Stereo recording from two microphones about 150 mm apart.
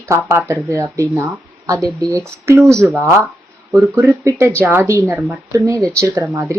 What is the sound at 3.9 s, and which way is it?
A woman's voice, 20° right (ahead or behind).